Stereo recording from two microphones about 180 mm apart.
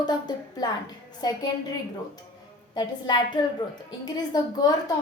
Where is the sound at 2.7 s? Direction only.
25° left (ahead or behind).